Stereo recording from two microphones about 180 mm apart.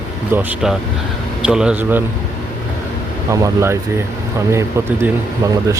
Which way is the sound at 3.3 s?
15° right (ahead or behind).